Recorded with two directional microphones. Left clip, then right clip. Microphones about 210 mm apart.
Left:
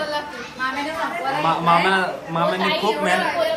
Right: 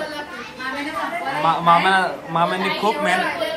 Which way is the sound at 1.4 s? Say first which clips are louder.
Right 2 dB; 5° left (ahead or behind).